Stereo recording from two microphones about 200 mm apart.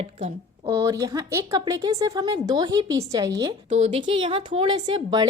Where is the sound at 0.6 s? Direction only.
15° right (ahead or behind).